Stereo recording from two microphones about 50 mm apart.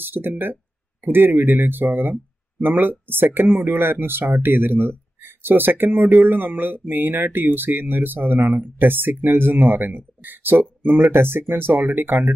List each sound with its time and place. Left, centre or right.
0.0 s speech: right